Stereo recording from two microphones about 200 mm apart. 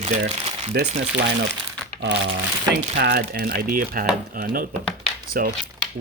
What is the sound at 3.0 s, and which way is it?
Speech, 55° right (ahead or behind).